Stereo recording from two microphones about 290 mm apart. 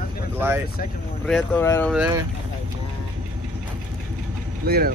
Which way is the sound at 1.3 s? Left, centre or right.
Centre.